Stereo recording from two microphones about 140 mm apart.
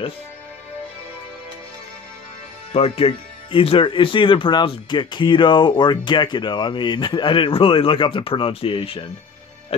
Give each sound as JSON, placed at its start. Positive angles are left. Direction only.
{"t": 2.7, "sound": "speech", "side_deg": 45}